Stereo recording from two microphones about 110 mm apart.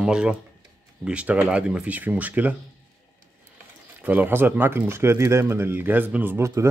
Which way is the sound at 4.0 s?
15° right (ahead or behind).